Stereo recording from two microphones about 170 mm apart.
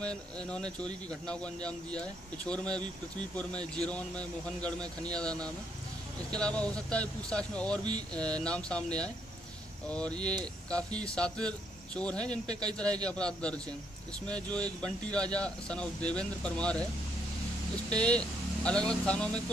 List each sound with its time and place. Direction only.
0.0 s speech: 5° left (ahead or behind)
12.4 s a man's voice: 25° right (ahead or behind)
13.0 s speech: 5° left (ahead or behind)
17.9 s speech: 5° left (ahead or behind)